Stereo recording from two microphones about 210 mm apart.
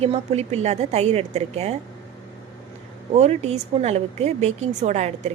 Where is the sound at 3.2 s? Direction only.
30° right (ahead or behind).